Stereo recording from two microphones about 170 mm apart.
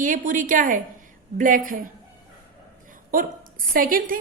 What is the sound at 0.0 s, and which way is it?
A woman's voice, 50° right (ahead or behind).